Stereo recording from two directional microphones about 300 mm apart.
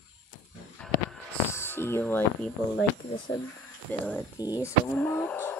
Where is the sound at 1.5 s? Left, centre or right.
Centre.